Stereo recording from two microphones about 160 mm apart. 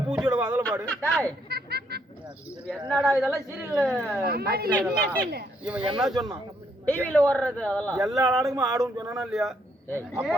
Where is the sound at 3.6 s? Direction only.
10° right (ahead or behind).